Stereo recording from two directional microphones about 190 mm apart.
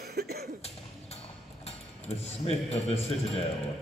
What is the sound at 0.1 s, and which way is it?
Cough, 55° right (ahead or behind).